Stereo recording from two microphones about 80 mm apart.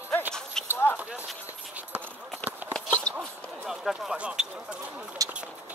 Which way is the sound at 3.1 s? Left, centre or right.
Centre.